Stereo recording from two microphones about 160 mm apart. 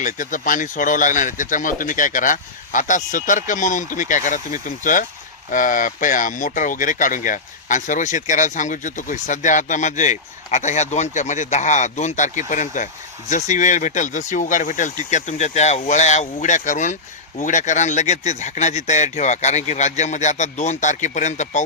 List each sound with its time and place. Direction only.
0.0 s speech: 55° left (ahead or behind)